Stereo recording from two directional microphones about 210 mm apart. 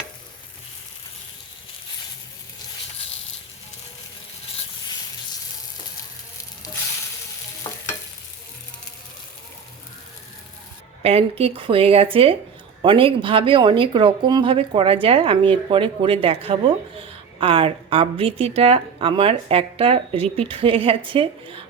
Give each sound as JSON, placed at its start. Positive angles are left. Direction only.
{"t": 7.6, "sound": "stir", "side_deg": 20}
{"t": 11.0, "sound": "speech", "side_deg": -30}